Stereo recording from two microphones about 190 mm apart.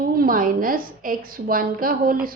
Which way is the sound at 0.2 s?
50° right (ahead or behind).